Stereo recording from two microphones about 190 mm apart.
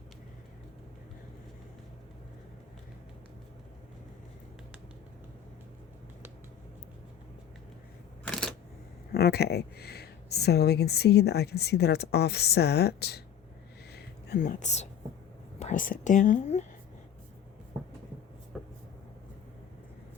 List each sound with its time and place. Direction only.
8.3 s a sound: 5° left (ahead or behind)
9.1 s speech: 55° left (ahead or behind)
14.3 s speech: 45° left (ahead or behind)
18.5 s vehicle: centre (ahead or behind)